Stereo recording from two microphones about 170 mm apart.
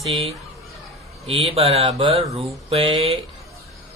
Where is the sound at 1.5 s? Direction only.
35° right (ahead or behind).